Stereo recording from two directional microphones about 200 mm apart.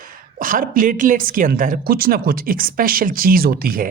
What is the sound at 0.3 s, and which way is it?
A woman's voice, 45° right (ahead or behind).